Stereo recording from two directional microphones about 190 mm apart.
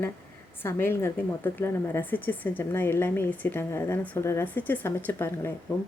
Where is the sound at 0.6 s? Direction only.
10° left (ahead or behind).